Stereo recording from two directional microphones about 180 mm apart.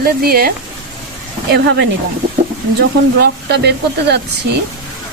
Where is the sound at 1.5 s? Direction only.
70° right (ahead or behind).